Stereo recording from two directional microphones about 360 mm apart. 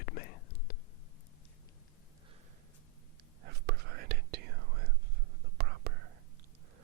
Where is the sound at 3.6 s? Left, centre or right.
Right.